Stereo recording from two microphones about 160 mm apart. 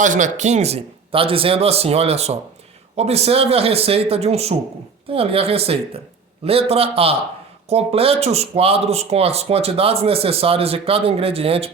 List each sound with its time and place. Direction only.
0.0 s speech: 50° right (ahead or behind)